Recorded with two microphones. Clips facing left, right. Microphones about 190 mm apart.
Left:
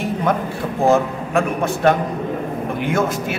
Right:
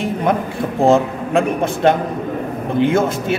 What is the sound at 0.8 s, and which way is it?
A man's voice, 25° right (ahead or behind).